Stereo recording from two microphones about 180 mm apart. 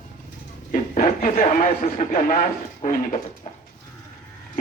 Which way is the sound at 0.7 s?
45° left (ahead or behind).